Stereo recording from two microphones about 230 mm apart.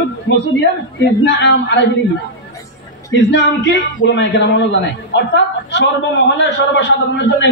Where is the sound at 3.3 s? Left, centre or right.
Left.